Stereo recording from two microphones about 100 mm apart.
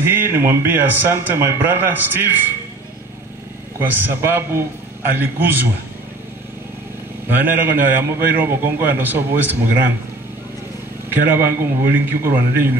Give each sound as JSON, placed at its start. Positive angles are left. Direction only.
{"t": 0.0, "sound": "a man's voice", "side_deg": -20}
{"t": 3.8, "sound": "a man's voice", "side_deg": -20}
{"t": 7.2, "sound": "a man's voice", "side_deg": -20}
{"t": 11.1, "sound": "a man's voice", "side_deg": -20}